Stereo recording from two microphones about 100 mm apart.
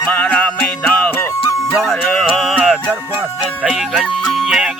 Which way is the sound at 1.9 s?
5° left (ahead or behind).